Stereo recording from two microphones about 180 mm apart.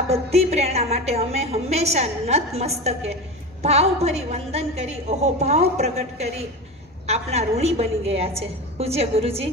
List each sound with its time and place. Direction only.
0.1 s a woman's voice: 35° right (ahead or behind)